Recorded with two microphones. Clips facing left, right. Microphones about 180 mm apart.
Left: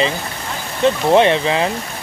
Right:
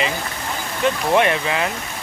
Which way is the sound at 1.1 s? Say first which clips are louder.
Left 5 dB; 30° left (ahead or behind).